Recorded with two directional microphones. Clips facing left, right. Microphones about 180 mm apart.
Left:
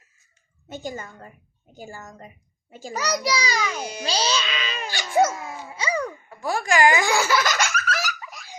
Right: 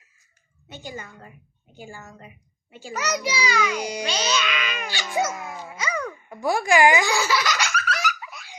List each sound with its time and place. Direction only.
0.7 s a woman's voice: 45° left (ahead or behind)
3.8 s a child's voice: 15° right (ahead or behind)
4.0 s music: 35° left (ahead or behind)
5.7 s babbling: 30° left (ahead or behind)
6.2 s speech: 15° right (ahead or behind)
7.0 s laughter: 55° left (ahead or behind)
8.0 s a sound: 40° left (ahead or behind)